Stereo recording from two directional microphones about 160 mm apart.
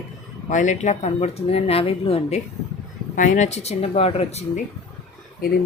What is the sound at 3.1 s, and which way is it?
Speech, 50° left (ahead or behind).